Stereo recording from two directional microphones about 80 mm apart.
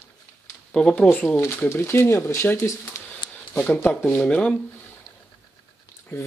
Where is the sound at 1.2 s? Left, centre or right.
Left.